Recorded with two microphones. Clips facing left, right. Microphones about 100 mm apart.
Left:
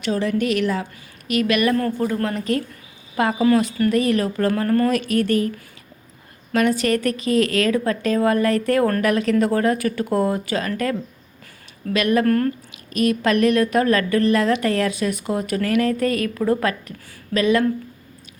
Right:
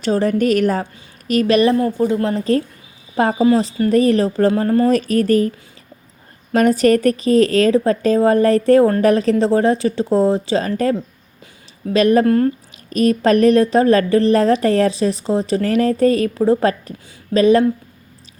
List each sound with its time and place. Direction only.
0.0 s a woman's voice: 35° right (ahead or behind)
1.7 s a woman's voice: 20° right (ahead or behind); by 5.5 s 35° right (ahead or behind)
6.5 s a woman's voice: 40° right (ahead or behind)
11.9 s a woman's voice: 35° right (ahead or behind)
12.2 s speech: 20° right (ahead or behind)
12.9 s a woman's voice: 35° right (ahead or behind)